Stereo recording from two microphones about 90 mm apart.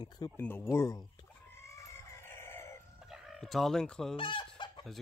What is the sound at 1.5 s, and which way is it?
Chicken, 30° left (ahead or behind).